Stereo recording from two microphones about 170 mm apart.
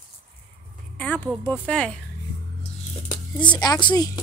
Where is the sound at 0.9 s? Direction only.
10° left (ahead or behind).